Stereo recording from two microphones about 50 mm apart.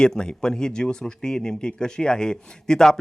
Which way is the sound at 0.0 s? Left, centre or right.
Centre.